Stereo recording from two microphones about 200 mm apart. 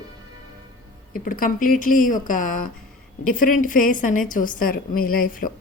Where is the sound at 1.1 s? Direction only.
45° left (ahead or behind).